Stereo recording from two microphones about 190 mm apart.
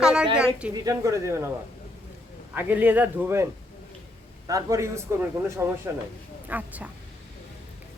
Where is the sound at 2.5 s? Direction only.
10° right (ahead or behind).